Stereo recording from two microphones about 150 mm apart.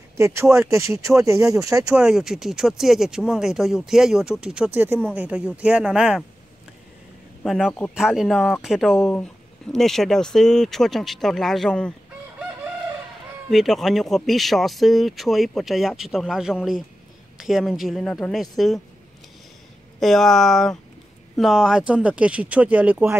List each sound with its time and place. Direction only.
0.2 s speech: 20° right (ahead or behind)
2.0 s speech: 5° right (ahead or behind)
7.4 s speech: centre (ahead or behind)
13.5 s speech: centre (ahead or behind)
20.0 s speech: centre (ahead or behind)